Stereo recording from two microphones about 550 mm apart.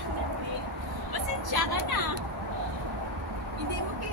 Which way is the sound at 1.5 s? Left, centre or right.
Right.